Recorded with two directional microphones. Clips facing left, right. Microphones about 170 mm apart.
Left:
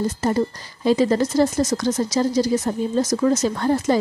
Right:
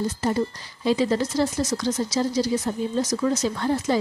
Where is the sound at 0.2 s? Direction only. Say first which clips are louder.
Left 3 dB; 45° left (ahead or behind).